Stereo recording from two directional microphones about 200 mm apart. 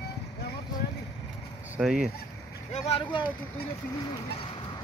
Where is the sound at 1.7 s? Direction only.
5° right (ahead or behind).